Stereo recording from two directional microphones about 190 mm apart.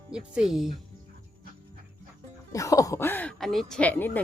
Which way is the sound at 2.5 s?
15° left (ahead or behind).